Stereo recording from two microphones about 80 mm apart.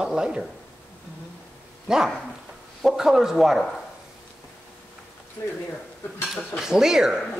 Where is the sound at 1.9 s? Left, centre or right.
Centre.